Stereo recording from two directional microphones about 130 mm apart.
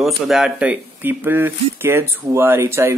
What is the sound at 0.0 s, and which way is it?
Speech, 5° right (ahead or behind).